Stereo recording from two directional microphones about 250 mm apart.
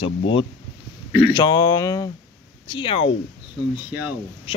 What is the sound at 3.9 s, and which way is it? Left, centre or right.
Speech, centre.